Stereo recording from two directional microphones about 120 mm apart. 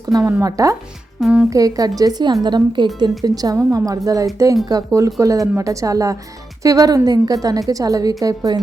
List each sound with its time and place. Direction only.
0.1 s a woman's voice: 30° right (ahead or behind)
1.2 s speech: 10° right (ahead or behind)
1.5 s a woman's voice: 30° right (ahead or behind)